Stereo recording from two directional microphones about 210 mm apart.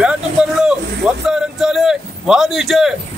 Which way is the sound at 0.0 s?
5° right (ahead or behind).